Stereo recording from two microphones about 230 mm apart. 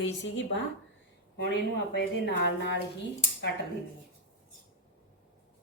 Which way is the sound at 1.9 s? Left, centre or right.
Left.